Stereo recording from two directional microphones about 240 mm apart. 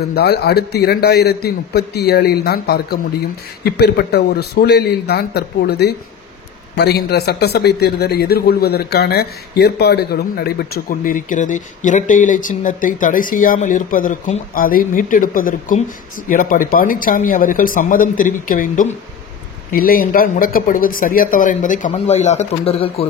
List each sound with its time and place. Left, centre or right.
0.1 s a man's voice: left